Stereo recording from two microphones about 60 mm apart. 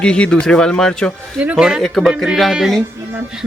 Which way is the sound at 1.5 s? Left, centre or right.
Centre.